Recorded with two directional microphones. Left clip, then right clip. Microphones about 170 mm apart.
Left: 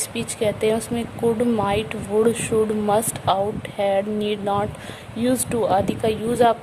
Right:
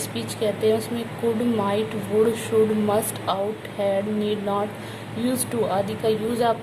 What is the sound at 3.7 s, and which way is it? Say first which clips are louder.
Speech: left 3 dB; 45° left (ahead or behind).